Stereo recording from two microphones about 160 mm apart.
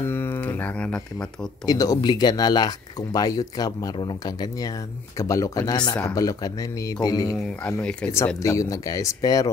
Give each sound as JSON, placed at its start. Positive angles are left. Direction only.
{"t": 0.1, "sound": "a sound", "side_deg": 15}
{"t": 1.7, "sound": "speech", "side_deg": 25}
{"t": 7.6, "sound": "speech", "side_deg": 10}
{"t": 8.4, "sound": "speech", "side_deg": 20}